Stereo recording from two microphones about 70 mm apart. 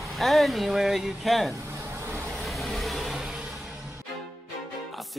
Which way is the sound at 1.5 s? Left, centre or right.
Right.